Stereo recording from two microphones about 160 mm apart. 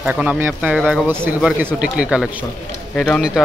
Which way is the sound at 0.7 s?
Centre (ahead or behind).